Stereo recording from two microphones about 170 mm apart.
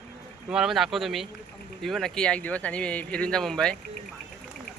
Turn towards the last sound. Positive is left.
turn(degrees=5)  # may be behind; listen again after turning